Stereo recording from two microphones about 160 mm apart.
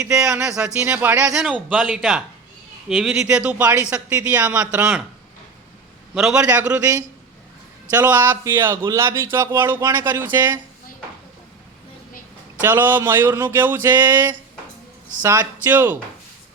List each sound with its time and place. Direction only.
0.0 s speech: 5° right (ahead or behind)
6.1 s speech: 5° right (ahead or behind)
7.9 s speech: 15° right (ahead or behind)
12.6 s a man's voice: 10° right (ahead or behind)